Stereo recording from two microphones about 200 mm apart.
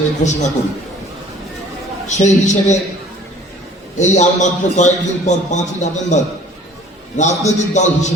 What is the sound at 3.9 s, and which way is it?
A man's voice, 35° left (ahead or behind).